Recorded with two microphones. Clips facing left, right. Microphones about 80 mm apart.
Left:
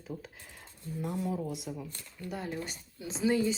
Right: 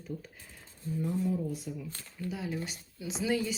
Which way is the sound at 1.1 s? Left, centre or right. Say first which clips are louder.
Right 2 dB; left.